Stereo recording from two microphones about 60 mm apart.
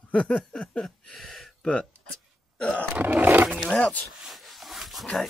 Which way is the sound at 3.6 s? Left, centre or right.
Centre.